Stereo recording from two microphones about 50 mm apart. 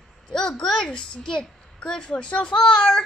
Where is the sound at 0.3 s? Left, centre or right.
Centre.